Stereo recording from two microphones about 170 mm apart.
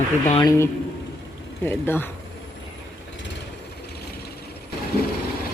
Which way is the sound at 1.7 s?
10° left (ahead or behind).